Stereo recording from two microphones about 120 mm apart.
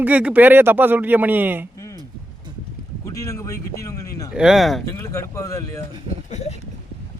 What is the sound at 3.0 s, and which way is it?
Speech, 25° left (ahead or behind).